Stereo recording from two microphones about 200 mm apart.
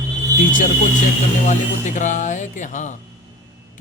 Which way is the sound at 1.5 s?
40° left (ahead or behind).